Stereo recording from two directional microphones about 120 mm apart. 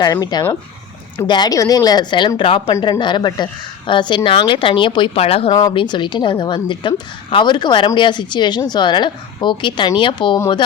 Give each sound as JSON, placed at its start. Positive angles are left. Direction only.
{"t": 0.0, "sound": "a woman's voice", "side_deg": 35}
{"t": 5.5, "sound": "a woman's voice", "side_deg": 35}